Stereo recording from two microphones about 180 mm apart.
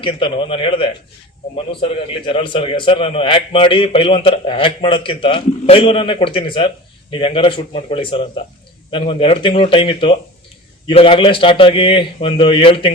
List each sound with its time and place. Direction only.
0.0 s a man's voice: 30° left (ahead or behind)